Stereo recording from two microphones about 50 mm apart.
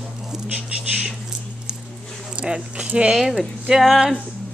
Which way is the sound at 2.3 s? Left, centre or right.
Centre.